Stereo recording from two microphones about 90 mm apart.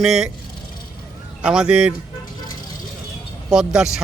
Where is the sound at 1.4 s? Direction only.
10° right (ahead or behind).